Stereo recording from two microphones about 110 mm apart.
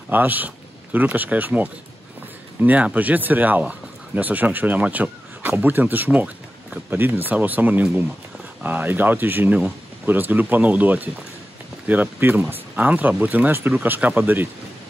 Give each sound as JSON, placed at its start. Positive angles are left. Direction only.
{"t": 0.1, "sound": "speech", "side_deg": -15}